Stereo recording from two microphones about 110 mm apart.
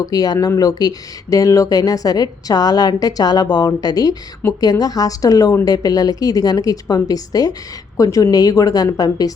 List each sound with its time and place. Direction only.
0.0 s speech: 35° left (ahead or behind)